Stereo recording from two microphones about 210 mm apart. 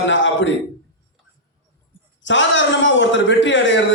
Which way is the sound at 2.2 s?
60° left (ahead or behind).